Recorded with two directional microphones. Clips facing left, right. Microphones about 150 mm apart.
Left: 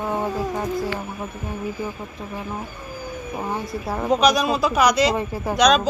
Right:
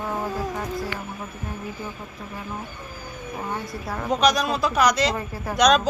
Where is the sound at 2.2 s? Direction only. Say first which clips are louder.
Left 5 dB; 20° left (ahead or behind).